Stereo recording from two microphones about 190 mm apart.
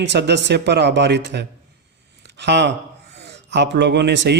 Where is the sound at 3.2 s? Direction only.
65° right (ahead or behind).